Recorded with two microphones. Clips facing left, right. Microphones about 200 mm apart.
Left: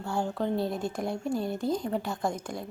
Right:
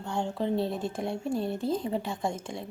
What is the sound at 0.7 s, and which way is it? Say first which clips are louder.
Speech: even; 30° right (ahead or behind).